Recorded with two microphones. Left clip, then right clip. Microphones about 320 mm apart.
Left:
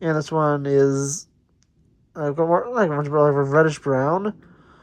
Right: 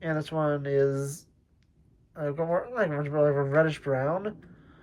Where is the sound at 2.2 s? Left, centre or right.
Centre.